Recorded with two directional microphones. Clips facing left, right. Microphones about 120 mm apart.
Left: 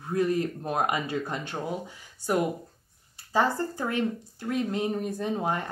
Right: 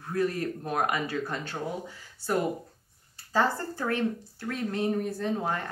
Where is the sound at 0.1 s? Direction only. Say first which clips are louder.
Left 3 dB; 20° left (ahead or behind).